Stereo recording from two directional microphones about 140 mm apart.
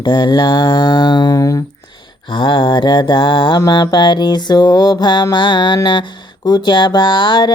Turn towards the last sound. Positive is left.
turn(degrees=30)  # may be behind; listen again after turning